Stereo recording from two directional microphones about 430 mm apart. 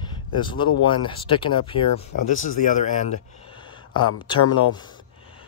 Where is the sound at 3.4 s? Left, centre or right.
Centre.